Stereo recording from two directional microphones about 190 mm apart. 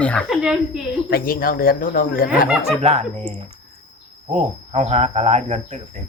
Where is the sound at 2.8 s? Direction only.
35° right (ahead or behind).